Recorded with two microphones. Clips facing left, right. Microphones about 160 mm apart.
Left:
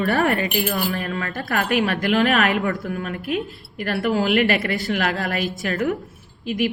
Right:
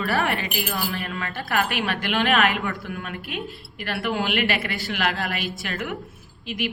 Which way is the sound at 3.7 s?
35° left (ahead or behind).